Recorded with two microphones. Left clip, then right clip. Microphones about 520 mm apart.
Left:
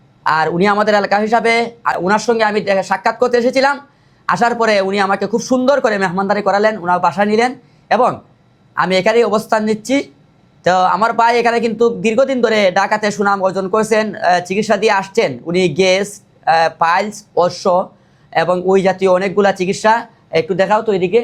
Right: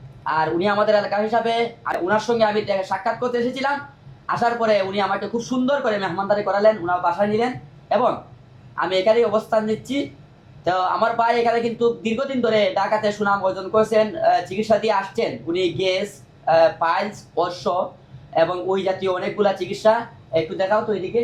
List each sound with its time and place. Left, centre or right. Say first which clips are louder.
0.3 s a man's voice: left 7 dB; left